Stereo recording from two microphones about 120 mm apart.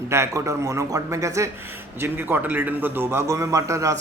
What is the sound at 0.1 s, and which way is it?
A man's voice, 25° right (ahead or behind).